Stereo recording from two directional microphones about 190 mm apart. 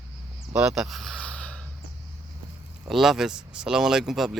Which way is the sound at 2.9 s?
Centre (ahead or behind).